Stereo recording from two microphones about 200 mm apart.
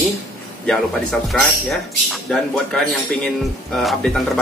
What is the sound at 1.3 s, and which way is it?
Speech, centre (ahead or behind).